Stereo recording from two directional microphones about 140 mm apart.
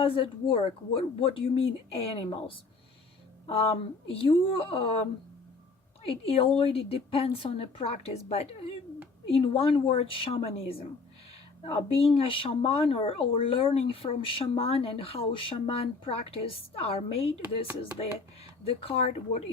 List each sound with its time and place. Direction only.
0.0 s speech: 40° left (ahead or behind)
6.1 s speech: 40° left (ahead or behind)
18.6 s speech: 45° left (ahead or behind)